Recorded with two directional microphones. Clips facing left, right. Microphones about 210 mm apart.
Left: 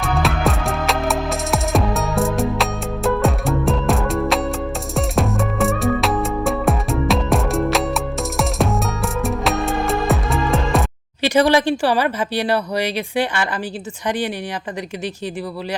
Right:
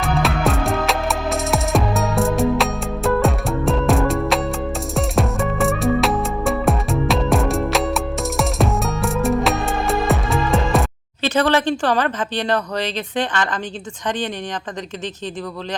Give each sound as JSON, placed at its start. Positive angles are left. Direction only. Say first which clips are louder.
{"t": 0.0, "sound": "music", "louder": "even", "side_deg": 0}
{"t": 11.2, "sound": "speech", "louder": "left 3 dB", "side_deg": 10}